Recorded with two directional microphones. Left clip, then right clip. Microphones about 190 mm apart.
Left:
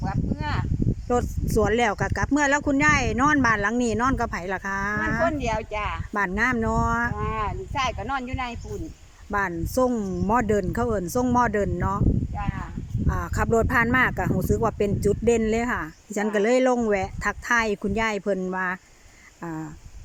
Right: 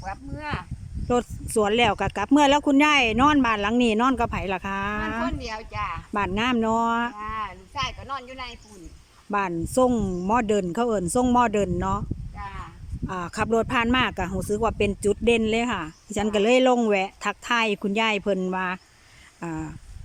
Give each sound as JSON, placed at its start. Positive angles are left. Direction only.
{"t": 0.0, "sound": "a sound", "side_deg": 5}
{"t": 1.0, "sound": "speech", "side_deg": 0}
{"t": 5.4, "sound": "speech", "side_deg": 45}
{"t": 6.1, "sound": "speech", "side_deg": -5}
{"t": 7.2, "sound": "speech", "side_deg": 55}
{"t": 9.3, "sound": "speech", "side_deg": -5}
{"t": 13.1, "sound": "speech", "side_deg": 0}